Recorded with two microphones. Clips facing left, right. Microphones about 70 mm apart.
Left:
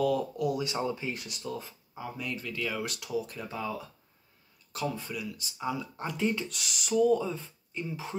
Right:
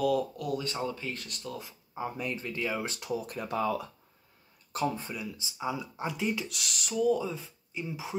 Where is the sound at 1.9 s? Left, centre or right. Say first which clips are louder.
Right 3 dB; right.